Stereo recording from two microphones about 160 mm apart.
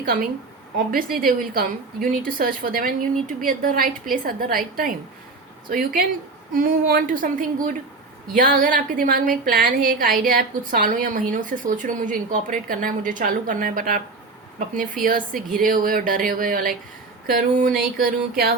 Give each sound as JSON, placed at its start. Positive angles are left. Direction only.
{"t": 1.1, "sound": "a woman's voice", "side_deg": -65}